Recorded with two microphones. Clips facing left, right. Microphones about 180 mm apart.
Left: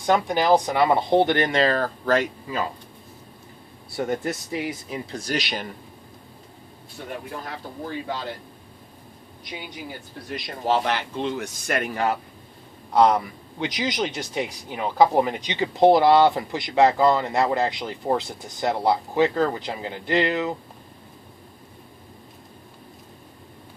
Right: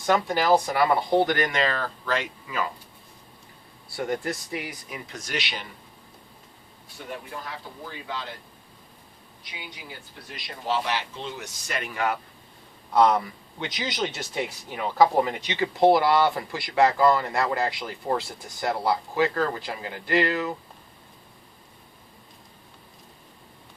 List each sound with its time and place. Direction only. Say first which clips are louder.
0.0 s speech: left 2 dB; 15° left (ahead or behind); by 2.3 s 45° left (ahead or behind)
3.9 s speech: left 3 dB; 25° left (ahead or behind); by 5.6 s 40° left (ahead or behind)
7.9 s speech: left 6 dB; 45° left (ahead or behind)
10.3 s speech: left 5 dB; 50° left (ahead or behind)
12.9 s speech: left 2 dB; 15° left (ahead or behind)